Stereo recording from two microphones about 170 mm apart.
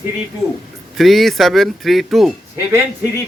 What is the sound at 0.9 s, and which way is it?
A man's voice, centre (ahead or behind).